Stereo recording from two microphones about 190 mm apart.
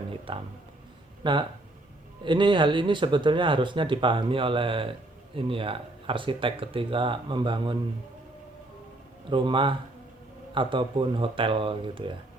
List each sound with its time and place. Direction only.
0.1 s music: 25° right (ahead or behind)
1.2 s speech: 25° right (ahead or behind)
9.3 s speech: 25° right (ahead or behind)